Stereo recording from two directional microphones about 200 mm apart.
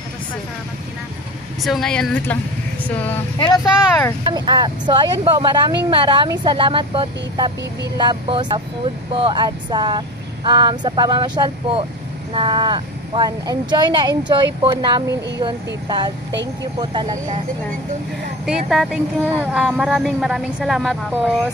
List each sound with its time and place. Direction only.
1.6 s speech: centre (ahead or behind)
3.3 s speech: 20° left (ahead or behind)
4.3 s speech: 20° right (ahead or behind)
18.4 s speech: centre (ahead or behind)